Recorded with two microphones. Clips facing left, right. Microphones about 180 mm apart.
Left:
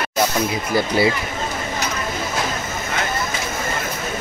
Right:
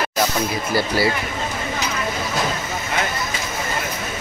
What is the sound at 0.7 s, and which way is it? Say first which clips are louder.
Speech: left 2 dB; 20° left (ahead or behind).